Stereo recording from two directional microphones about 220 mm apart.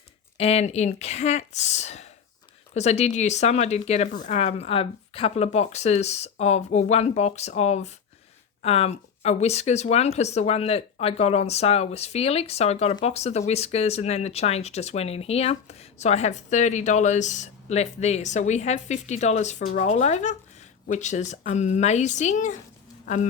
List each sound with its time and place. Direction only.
0.3 s a woman's voice: 30° left (ahead or behind)